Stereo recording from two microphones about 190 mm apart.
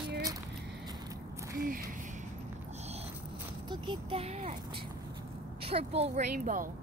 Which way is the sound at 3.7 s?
25° right (ahead or behind).